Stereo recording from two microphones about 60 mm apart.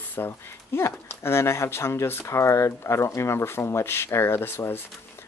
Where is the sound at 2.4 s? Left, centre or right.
Left.